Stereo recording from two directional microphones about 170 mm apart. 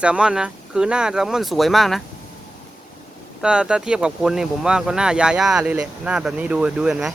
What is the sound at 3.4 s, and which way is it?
Speech, 5° right (ahead or behind).